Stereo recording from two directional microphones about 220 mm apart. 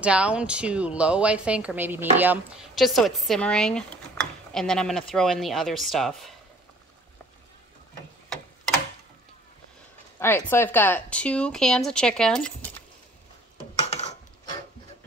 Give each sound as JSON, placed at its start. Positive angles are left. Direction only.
{"t": 0.0, "sound": "speech", "side_deg": -5}
{"t": 10.1, "sound": "speech", "side_deg": 10}
{"t": 13.8, "sound": "a sound", "side_deg": 30}